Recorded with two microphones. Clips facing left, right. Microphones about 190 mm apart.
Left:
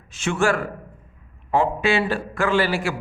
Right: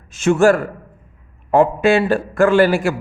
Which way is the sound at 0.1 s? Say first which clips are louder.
Right 8 dB; 45° right (ahead or behind).